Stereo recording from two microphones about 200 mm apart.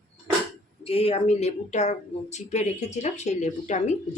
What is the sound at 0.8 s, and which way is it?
Speech, 30° left (ahead or behind).